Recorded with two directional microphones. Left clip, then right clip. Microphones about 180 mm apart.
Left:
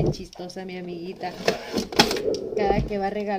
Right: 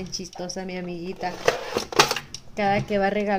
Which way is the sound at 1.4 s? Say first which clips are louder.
Right 1 dB; 20° left (ahead or behind).